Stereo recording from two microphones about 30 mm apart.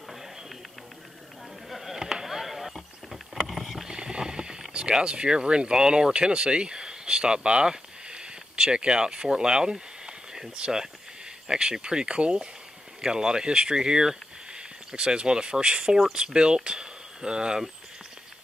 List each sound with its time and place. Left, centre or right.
1.7 s chop: centre
2.2 s a sound: centre
3.4 s boat: centre
3.9 s rowboat: right
5.0 s speech: right
6.3 s speech: right
11.4 s speech: right